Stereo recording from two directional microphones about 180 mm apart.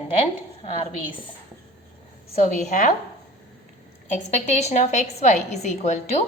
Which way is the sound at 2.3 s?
40° left (ahead or behind).